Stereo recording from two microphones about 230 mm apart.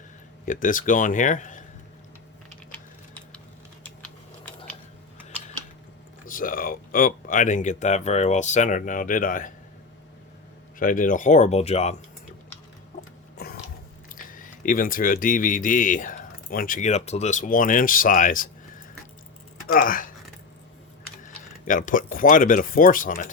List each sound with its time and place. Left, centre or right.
0.4 s speech: left
2.7 s typing: centre
6.2 s speech: left
10.8 s speech: left
13.3 s a sound: left
14.1 s speech: left
19.7 s speech: left
21.2 s speech: left